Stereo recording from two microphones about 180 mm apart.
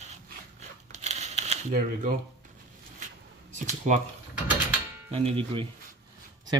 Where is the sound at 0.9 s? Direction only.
40° right (ahead or behind).